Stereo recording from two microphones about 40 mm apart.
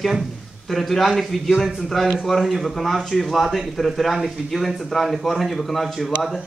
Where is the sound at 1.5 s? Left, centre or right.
Centre.